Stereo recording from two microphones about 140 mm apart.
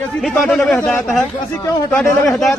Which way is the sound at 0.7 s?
15° left (ahead or behind).